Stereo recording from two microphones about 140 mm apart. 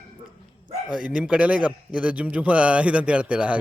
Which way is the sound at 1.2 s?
10° right (ahead or behind).